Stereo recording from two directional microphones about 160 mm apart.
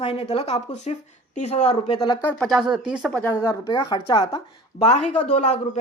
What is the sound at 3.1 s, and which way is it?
Speech, 10° left (ahead or behind).